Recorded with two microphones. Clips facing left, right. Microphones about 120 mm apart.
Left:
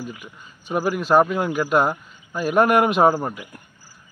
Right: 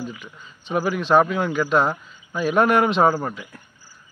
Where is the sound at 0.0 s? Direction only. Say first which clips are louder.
Right 1 dB; 10° left (ahead or behind).